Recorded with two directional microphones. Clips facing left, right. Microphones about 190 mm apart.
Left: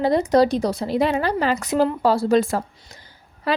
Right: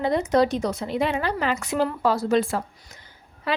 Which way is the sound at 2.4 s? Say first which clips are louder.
Left 3 dB; 40° left (ahead or behind).